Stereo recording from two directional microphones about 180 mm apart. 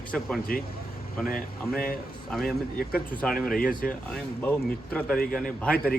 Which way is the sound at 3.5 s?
50° left (ahead or behind).